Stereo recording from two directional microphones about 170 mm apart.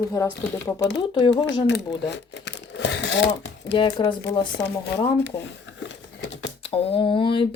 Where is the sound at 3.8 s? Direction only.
30° left (ahead or behind).